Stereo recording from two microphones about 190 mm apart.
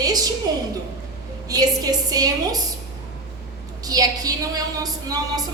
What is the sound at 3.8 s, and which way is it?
A woman's voice, 20° right (ahead or behind).